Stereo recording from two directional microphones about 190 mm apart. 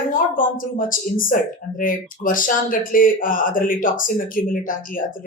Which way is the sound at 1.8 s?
45° left (ahead or behind).